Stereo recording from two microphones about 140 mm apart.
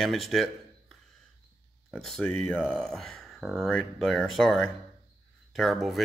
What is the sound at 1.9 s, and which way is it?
Speech, centre (ahead or behind).